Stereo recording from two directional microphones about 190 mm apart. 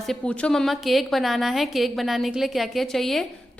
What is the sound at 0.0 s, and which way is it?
A woman's voice, 5° left (ahead or behind).